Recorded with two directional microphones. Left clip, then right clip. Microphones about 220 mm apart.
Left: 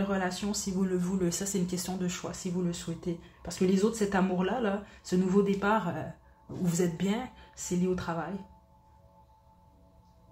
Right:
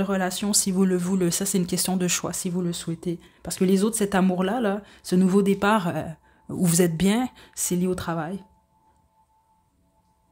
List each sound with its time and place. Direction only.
0.0 s speech: 50° right (ahead or behind)